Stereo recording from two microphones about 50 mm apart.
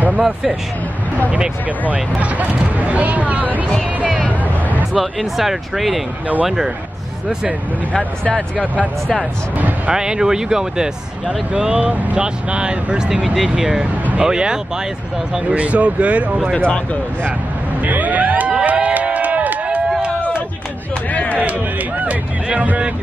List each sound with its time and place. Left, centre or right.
0.2 s speech: centre
1.3 s speech: right
4.3 s hubbub: right
4.9 s speech: centre
7.9 s speech: left
9.8 s speech: centre
13.2 s speech: centre
14.2 s speech: centre
15.5 s speech: right
16.5 s speech: centre
17.8 s music: right
18.6 s crowd: right
21.1 s a sound: left
22.0 s speech: right